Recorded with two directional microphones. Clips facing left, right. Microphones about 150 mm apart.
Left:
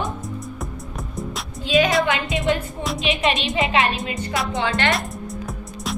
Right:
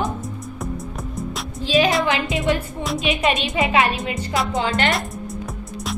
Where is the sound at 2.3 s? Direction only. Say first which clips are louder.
Right 1 dB; 20° left (ahead or behind).